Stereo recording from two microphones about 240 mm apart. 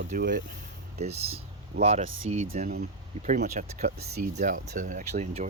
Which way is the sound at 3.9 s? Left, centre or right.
Right.